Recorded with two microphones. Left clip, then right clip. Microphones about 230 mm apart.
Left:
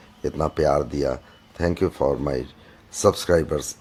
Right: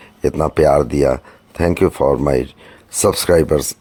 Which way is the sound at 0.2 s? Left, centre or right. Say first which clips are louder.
Right 8 dB; right.